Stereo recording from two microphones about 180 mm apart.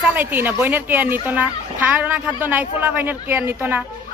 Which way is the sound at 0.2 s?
10° right (ahead or behind).